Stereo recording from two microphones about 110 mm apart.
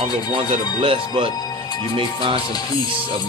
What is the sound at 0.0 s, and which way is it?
Speech, 60° right (ahead or behind).